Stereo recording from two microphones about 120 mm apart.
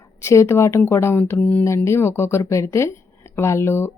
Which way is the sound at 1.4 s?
10° left (ahead or behind).